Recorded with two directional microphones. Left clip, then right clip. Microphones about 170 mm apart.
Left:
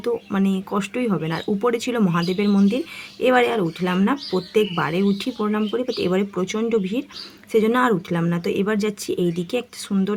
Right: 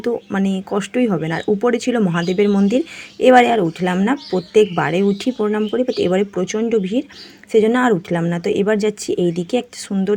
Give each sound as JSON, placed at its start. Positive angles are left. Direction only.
{"t": 0.0, "sound": "speech", "side_deg": -10}